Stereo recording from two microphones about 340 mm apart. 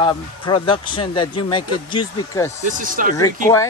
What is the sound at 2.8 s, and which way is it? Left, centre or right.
Speech, right.